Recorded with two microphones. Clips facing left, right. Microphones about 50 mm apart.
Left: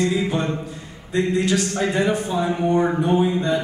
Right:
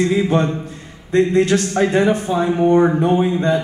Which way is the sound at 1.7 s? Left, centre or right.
Right.